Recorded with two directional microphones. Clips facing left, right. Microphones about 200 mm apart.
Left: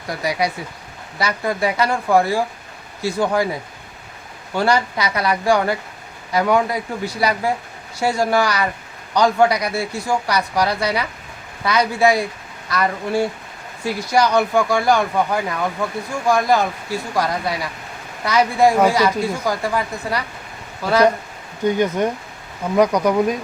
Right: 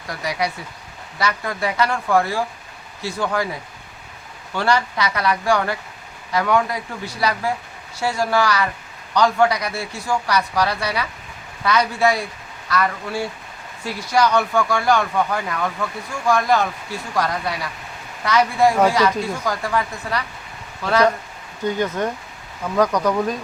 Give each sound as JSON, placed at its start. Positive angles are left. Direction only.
{"t": 0.1, "sound": "speech", "side_deg": 10}
{"t": 4.5, "sound": "speech", "side_deg": 15}
{"t": 21.7, "sound": "speech", "side_deg": 15}